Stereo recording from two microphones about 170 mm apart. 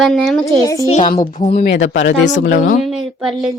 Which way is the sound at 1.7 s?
90° left.